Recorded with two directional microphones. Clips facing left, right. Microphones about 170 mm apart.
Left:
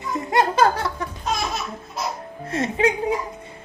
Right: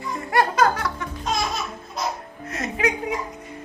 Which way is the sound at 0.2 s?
20° left (ahead or behind).